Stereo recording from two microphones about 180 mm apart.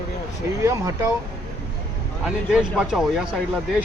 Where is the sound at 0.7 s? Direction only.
20° right (ahead or behind).